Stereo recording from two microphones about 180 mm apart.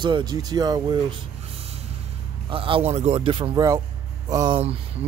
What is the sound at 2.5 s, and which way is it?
Speech, 30° right (ahead or behind).